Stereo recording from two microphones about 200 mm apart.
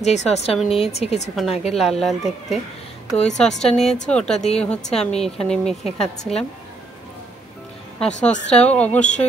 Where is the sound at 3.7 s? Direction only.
5° left (ahead or behind).